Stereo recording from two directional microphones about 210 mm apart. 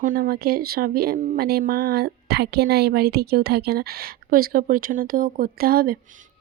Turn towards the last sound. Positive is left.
turn(degrees=-45)  # may be behind; listen again after turning